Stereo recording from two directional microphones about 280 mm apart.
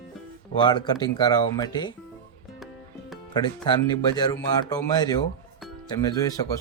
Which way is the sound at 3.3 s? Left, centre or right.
Centre.